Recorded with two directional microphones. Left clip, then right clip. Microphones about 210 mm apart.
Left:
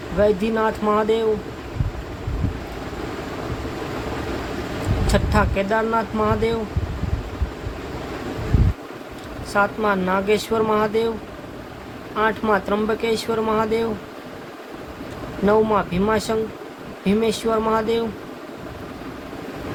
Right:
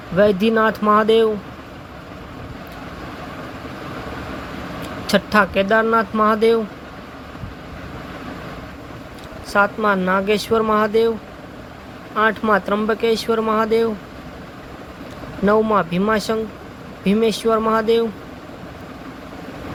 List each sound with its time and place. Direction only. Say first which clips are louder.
0.2 s speech: right 4 dB; 15° right (ahead or behind)
5.0 s speech: right 5 dB; 15° right (ahead or behind)
9.5 s speech: right 3 dB; 15° right (ahead or behind)
12.1 s speech: right 3 dB; 15° right (ahead or behind)
15.4 s speech: right 2 dB; 15° right (ahead or behind)